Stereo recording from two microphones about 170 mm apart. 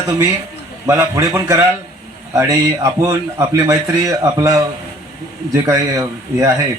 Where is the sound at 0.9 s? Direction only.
15° right (ahead or behind).